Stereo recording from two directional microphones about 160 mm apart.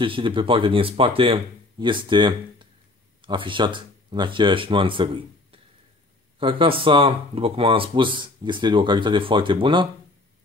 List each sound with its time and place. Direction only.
0.0 s speech: 30° right (ahead or behind)